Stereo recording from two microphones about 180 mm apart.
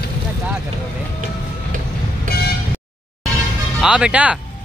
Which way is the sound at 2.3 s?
60° left (ahead or behind).